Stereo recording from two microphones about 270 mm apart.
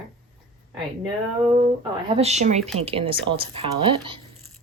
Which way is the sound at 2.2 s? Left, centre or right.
Right.